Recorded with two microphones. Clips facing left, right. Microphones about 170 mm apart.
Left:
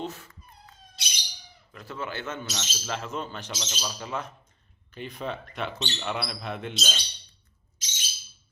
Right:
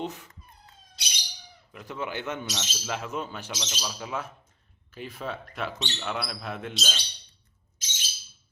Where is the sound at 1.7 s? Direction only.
15° right (ahead or behind).